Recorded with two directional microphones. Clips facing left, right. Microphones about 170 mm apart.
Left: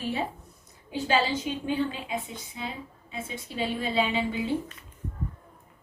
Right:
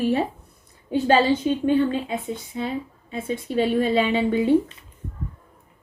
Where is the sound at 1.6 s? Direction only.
60° right (ahead or behind).